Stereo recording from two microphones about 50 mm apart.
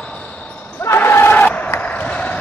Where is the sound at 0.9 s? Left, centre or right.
Left.